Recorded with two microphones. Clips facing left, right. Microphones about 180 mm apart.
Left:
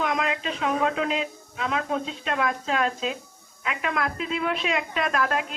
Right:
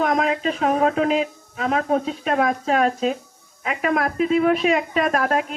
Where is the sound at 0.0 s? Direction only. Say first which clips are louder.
Right 6 dB; 45° right (ahead or behind).